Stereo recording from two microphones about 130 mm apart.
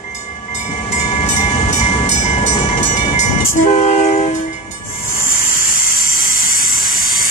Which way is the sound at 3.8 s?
60° left (ahead or behind).